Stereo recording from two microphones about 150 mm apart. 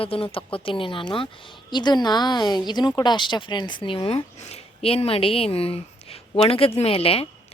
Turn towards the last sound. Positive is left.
turn(degrees=40)  # may be behind; listen again after turning